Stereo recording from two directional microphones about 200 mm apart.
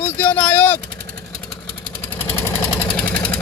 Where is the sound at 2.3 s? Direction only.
15° left (ahead or behind).